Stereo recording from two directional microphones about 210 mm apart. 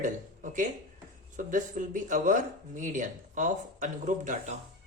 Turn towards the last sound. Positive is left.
turn(degrees=-35)  # may be behind; listen again after turning